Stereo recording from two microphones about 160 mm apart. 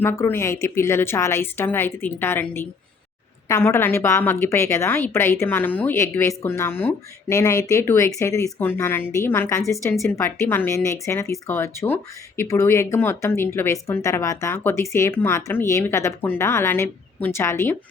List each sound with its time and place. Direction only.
0.0 s a woman's voice: 15° left (ahead or behind)